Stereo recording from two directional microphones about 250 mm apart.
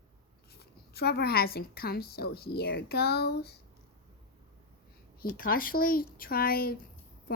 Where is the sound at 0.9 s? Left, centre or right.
Left.